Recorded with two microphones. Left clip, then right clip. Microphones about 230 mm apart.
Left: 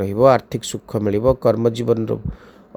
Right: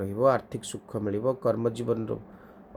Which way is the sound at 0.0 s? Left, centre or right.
Left.